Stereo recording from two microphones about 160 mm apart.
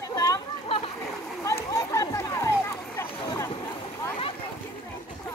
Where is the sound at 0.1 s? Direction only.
20° left (ahead or behind).